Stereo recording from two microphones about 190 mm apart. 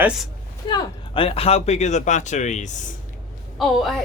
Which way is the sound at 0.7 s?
25° left (ahead or behind).